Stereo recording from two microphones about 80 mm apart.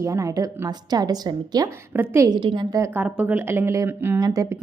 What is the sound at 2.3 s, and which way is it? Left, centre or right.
Speech, right.